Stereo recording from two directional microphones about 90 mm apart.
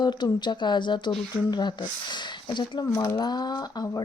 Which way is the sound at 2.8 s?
40° left (ahead or behind).